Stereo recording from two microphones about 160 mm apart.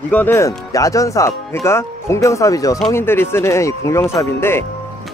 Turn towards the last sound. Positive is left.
turn(degrees=15)  # may be behind; listen again after turning